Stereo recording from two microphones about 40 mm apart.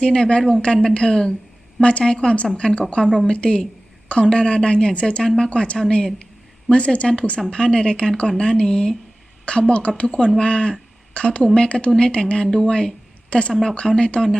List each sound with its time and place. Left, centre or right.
0.0 s a woman's voice: left
8.6 s speech: centre
9.5 s a woman's voice: left